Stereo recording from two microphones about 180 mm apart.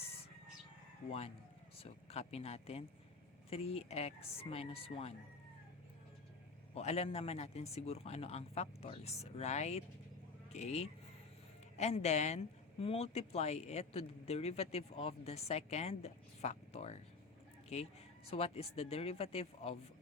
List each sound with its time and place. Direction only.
1.8 s speech: 35° left (ahead or behind)
6.7 s speech: 35° left (ahead or behind)
18.3 s speech: 35° left (ahead or behind)